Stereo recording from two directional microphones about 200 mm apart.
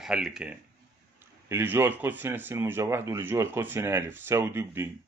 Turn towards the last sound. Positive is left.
turn(degrees=-10)  # may be behind; listen again after turning